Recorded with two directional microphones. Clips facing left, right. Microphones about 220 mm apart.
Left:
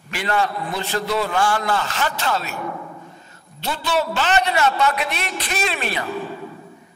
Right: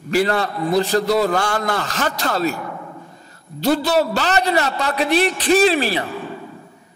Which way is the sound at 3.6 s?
40° right (ahead or behind).